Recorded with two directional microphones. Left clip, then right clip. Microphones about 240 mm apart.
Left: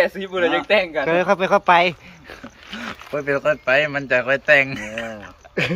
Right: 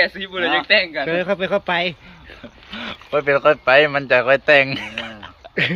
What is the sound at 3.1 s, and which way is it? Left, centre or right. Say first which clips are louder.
Speech: right 5 dB; centre.